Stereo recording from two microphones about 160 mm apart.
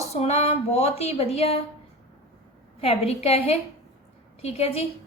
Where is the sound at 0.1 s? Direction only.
40° left (ahead or behind).